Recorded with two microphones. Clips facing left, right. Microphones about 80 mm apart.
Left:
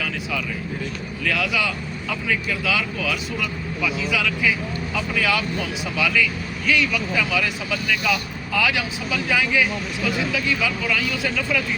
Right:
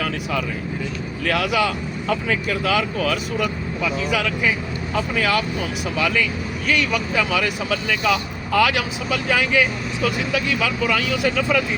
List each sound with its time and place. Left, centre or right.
1.3 s speech: right
8.5 s speech: right